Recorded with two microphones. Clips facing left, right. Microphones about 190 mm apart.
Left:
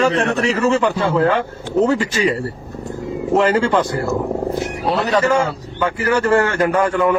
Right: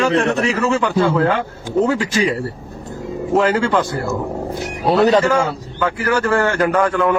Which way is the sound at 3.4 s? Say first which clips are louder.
Left 1 dB; 10° left (ahead or behind).